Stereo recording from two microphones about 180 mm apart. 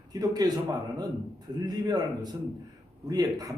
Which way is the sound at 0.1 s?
20° right (ahead or behind).